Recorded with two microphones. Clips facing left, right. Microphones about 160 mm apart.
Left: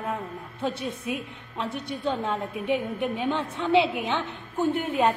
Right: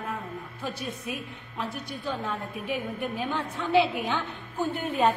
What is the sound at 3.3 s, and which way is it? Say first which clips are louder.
Speech: left 5 dB; 25° left (ahead or behind).